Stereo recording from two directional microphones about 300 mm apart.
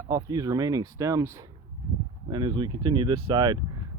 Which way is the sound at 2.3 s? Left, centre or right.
Centre.